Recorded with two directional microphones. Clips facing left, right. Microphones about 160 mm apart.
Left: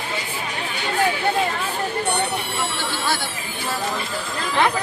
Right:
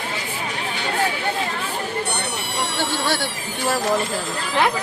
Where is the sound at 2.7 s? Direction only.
75° right (ahead or behind).